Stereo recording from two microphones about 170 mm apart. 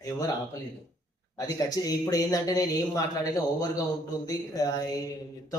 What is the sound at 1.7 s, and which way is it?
A man's voice, 20° left (ahead or behind).